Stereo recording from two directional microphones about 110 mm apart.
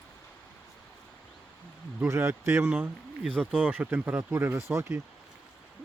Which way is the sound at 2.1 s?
25° right (ahead or behind).